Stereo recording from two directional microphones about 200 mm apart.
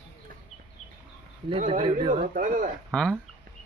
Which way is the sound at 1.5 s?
35° right (ahead or behind).